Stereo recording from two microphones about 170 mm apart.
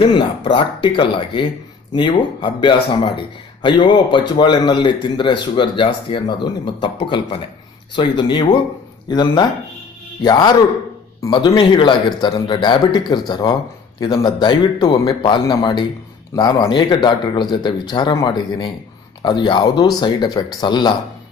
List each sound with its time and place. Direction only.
0.0 s speech: 30° left (ahead or behind)